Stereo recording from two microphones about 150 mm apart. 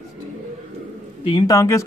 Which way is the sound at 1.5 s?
20° left (ahead or behind).